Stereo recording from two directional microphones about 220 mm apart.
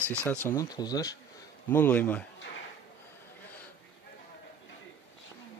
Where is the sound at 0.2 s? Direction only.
5° left (ahead or behind).